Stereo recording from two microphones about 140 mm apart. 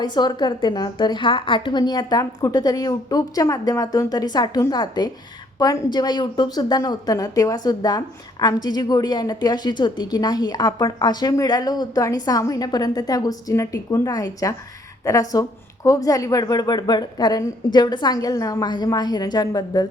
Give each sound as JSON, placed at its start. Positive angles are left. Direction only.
{"t": 0.0, "sound": "a woman's voice", "side_deg": 30}